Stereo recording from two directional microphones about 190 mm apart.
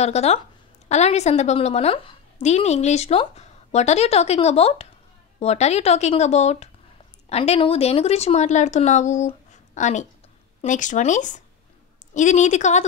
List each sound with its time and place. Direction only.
0.0 s a woman's voice: 35° left (ahead or behind)